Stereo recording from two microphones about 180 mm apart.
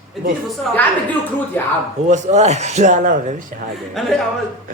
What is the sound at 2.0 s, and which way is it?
Speech, 40° right (ahead or behind).